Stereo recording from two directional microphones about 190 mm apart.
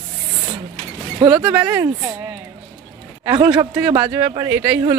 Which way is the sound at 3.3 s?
20° right (ahead or behind).